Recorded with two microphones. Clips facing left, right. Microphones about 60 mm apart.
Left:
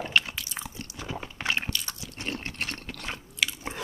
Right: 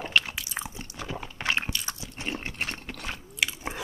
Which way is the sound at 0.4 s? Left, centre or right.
Centre.